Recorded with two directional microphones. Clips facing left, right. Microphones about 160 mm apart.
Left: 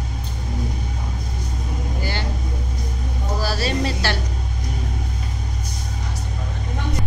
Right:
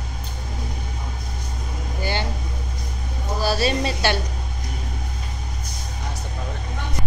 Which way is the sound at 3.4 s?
25° right (ahead or behind).